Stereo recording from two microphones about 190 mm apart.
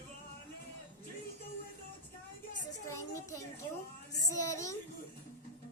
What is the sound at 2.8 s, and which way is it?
Child singing, 15° left (ahead or behind).